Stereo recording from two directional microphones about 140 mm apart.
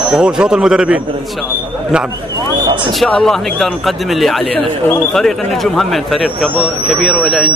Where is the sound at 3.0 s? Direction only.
5° left (ahead or behind).